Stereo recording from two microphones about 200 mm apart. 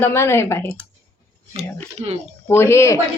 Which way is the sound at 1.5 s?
30° right (ahead or behind).